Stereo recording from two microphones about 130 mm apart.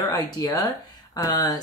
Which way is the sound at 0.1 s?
30° left (ahead or behind).